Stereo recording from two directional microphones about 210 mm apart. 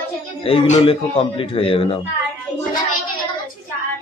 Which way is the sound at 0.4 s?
25° left (ahead or behind).